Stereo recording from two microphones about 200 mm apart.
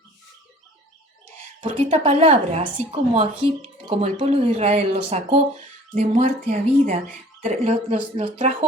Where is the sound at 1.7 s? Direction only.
30° right (ahead or behind).